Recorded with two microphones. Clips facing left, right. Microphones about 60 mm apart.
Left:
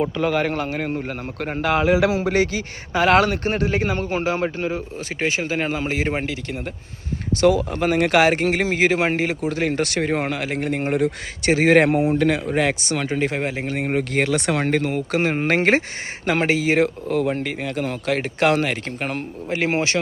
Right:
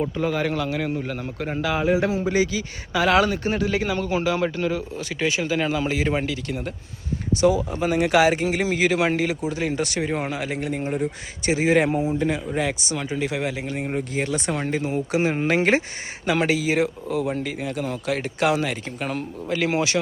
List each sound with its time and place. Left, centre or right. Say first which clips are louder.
0.0 s speech: left 3 dB; left
1.6 s speech: left 4 dB; left
2.3 s speech: left 2 dB; left
7.4 s speech: left 3 dB; left
9.5 s speech: left 3 dB; left
13.9 s speech: left 6 dB; left
19.5 s speech: left 1 dB; left